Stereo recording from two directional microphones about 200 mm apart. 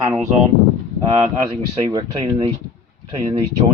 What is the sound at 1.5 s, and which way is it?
Speech, 30° right (ahead or behind).